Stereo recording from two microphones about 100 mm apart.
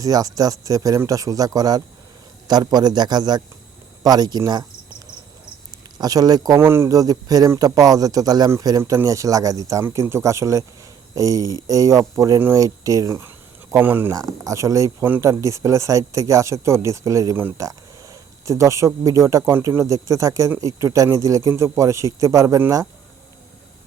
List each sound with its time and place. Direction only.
0.0 s a man's voice: 35° right (ahead or behind)
6.0 s speech: 40° right (ahead or behind)
6.6 s speech: 25° right (ahead or behind)
13.7 s speech: 20° right (ahead or behind)
14.4 s speech: 35° right (ahead or behind)